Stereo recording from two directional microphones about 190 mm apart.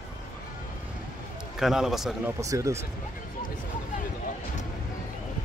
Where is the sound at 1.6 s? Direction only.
Centre (ahead or behind).